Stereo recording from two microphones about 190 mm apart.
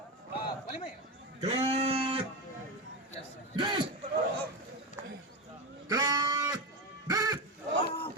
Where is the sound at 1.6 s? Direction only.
30° right (ahead or behind).